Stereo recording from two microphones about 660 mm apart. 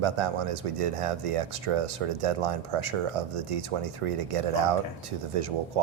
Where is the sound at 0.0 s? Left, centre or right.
Right.